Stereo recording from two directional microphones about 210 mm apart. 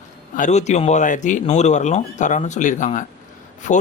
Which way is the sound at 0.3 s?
35° left (ahead or behind).